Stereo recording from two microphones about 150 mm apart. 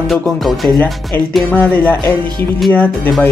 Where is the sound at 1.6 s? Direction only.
10° left (ahead or behind).